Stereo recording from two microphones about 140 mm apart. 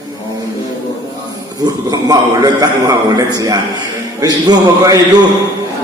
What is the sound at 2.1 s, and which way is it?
A man's voice, 25° right (ahead or behind).